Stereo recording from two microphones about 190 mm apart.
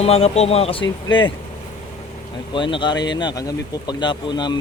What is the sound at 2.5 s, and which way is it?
Speech, 25° left (ahead or behind).